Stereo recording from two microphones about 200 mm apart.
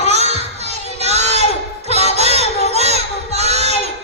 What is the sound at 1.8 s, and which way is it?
Music, 30° right (ahead or behind).